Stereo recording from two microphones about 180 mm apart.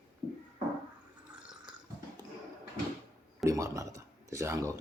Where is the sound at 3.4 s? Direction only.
15° right (ahead or behind).